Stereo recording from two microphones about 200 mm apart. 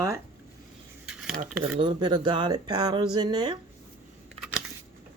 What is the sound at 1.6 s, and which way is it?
Speech, 25° right (ahead or behind).